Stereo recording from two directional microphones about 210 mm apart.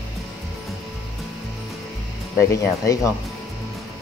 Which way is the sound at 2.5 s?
15° left (ahead or behind).